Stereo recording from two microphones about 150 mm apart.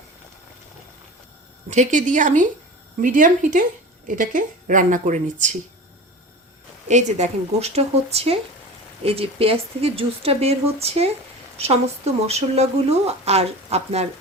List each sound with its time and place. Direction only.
1.7 s a woman's voice: 55° right (ahead or behind)
6.8 s speech: 50° right (ahead or behind)